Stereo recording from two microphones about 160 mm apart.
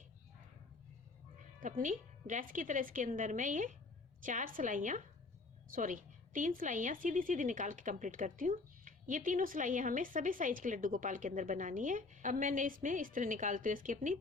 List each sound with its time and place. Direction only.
1.6 s a woman's voice: 55° right (ahead or behind)